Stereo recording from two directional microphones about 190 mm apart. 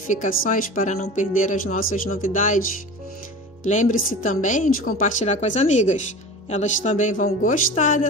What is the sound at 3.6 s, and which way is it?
A woman's voice, 40° left (ahead or behind).